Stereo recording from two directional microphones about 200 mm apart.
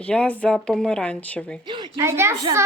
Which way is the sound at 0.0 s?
5° left (ahead or behind).